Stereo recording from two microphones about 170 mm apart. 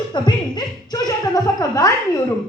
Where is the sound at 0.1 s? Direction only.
25° left (ahead or behind).